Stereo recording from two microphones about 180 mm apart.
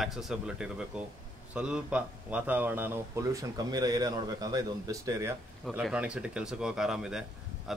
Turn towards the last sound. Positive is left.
turn(degrees=-5)  # may be behind; listen again after turning